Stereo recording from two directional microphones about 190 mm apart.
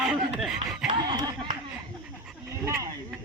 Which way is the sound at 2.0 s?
5° right (ahead or behind).